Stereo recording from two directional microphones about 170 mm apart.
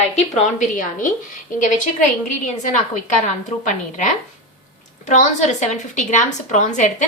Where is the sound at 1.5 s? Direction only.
45° left (ahead or behind).